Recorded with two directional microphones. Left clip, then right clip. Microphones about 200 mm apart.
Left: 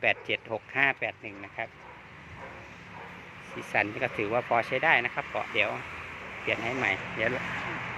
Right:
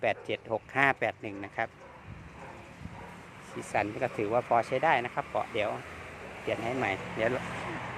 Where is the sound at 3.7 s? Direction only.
5° right (ahead or behind).